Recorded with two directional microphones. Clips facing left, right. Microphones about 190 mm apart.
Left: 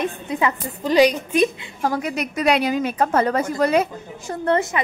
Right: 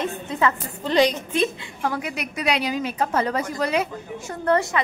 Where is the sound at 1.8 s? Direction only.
40° left (ahead or behind).